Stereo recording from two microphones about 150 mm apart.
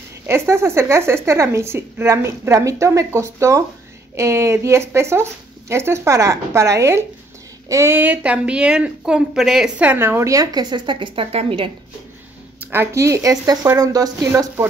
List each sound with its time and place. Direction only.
0.3 s a woman's voice: 15° right (ahead or behind); by 11.7 s 40° right (ahead or behind)
12.5 s a woman's voice: 15° right (ahead or behind)